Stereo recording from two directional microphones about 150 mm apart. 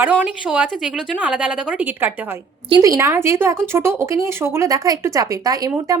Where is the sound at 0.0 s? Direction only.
10° right (ahead or behind).